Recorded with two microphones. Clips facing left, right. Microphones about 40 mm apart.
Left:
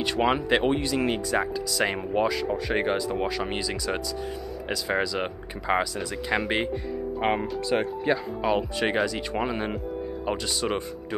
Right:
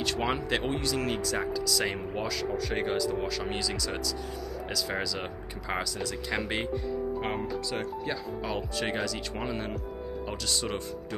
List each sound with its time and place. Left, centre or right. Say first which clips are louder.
0.0 s speech: left 5 dB; centre
7.2 s speech: left 6 dB; left; by 11.1 s centre